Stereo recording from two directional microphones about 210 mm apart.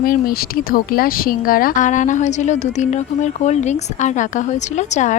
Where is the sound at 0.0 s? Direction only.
45° left (ahead or behind).